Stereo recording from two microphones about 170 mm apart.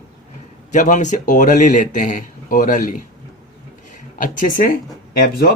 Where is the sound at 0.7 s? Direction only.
45° left (ahead or behind).